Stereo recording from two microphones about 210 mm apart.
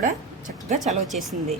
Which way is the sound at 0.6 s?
35° right (ahead or behind).